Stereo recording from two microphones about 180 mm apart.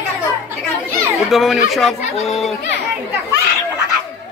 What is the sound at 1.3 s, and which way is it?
Speech, centre (ahead or behind).